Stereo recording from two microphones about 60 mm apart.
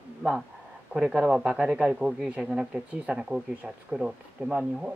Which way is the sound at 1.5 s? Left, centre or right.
Centre.